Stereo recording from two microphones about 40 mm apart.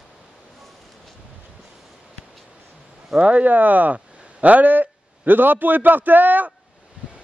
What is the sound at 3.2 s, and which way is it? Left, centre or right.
A man's voice, right.